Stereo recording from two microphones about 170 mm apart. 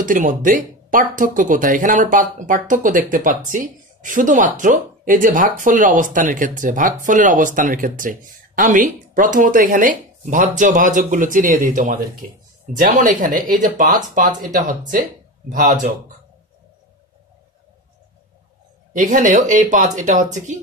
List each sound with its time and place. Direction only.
0.0 s speech: 50° right (ahead or behind)
18.9 s speech: 50° right (ahead or behind)